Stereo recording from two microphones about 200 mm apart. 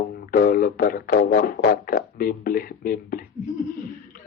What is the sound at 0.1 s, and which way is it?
Speech, 45° left (ahead or behind).